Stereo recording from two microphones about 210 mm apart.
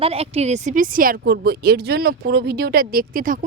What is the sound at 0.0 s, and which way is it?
A woman's voice, 30° right (ahead or behind).